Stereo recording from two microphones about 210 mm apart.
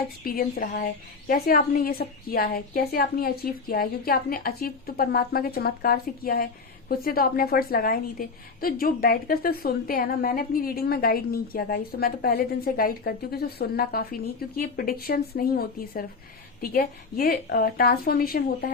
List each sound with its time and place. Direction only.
0.3 s a woman's voice: 45° left (ahead or behind)